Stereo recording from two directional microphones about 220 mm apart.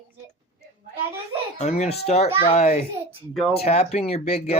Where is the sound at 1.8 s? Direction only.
30° left (ahead or behind).